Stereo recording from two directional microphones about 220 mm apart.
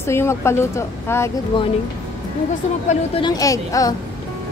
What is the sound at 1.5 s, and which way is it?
Speech, 25° left (ahead or behind).